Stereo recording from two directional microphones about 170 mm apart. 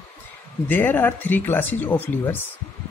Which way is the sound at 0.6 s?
10° left (ahead or behind).